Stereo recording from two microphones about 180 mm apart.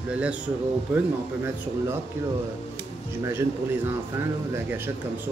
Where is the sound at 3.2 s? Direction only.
15° right (ahead or behind).